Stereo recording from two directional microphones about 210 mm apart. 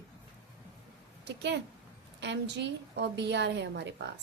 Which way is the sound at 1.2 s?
55° right (ahead or behind).